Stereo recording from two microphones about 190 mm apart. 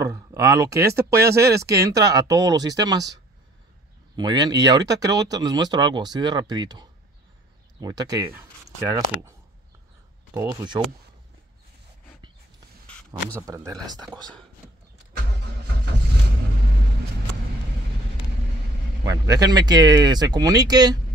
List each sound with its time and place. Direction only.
0.0 s speech: 15° right (ahead or behind)
4.2 s speech: 20° right (ahead or behind)
10.3 s speech: 20° right (ahead or behind)
13.3 s speech: 15° right (ahead or behind)
19.0 s speech: 20° right (ahead or behind)